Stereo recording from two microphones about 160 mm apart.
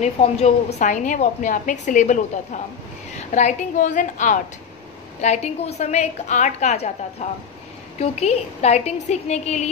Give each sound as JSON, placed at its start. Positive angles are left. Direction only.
{"t": 0.0, "sound": "a woman's voice", "side_deg": 40}